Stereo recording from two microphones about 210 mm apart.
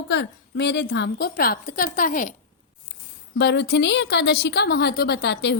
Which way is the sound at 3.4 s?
50° left (ahead or behind).